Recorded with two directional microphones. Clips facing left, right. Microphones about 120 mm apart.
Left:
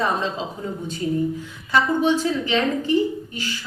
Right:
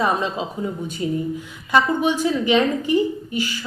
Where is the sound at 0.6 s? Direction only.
20° right (ahead or behind).